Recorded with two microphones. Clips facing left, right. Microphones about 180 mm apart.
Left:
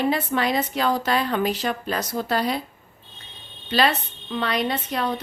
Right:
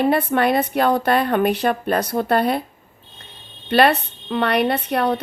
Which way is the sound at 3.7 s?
60° right (ahead or behind).